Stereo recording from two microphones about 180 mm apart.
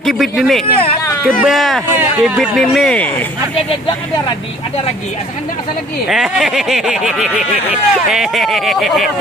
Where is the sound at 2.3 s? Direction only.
Centre (ahead or behind).